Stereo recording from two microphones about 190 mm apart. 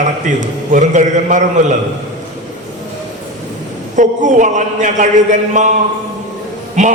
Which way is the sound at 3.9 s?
40° right (ahead or behind).